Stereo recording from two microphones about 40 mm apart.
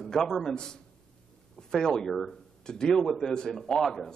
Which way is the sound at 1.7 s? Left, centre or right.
Centre.